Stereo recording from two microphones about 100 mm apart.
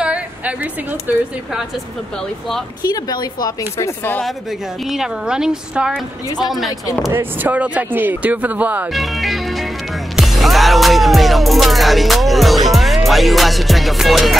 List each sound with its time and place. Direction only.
0.0 s a sound: 10° right (ahead or behind)
1.1 s speech: 20° right (ahead or behind)
2.8 s speech: 40° left (ahead or behind)
3.7 s speech: 25° left (ahead or behind)
4.8 s a woman's voice: 5° right (ahead or behind)
7.1 s speech: 20° right (ahead or behind)
8.9 s a woman's voice: centre (ahead or behind)
10.1 s music: centre (ahead or behind)